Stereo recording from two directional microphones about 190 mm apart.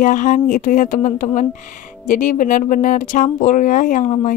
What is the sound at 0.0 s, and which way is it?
A woman's voice, 40° left (ahead or behind).